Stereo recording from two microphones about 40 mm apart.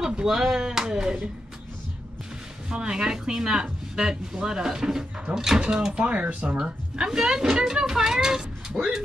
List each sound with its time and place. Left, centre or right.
0.2 s speech: centre
2.7 s speech: centre
5.9 s speech: right
6.5 s speech: centre